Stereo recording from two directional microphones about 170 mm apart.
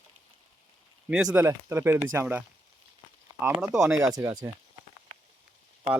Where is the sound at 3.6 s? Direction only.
5° right (ahead or behind).